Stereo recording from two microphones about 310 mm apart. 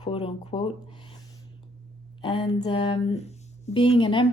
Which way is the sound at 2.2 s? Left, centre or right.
Centre.